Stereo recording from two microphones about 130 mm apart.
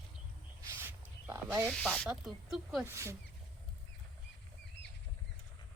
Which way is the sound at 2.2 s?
Centre (ahead or behind).